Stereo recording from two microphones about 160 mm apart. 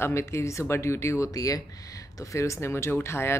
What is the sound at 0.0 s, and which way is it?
Speech, 15° left (ahead or behind).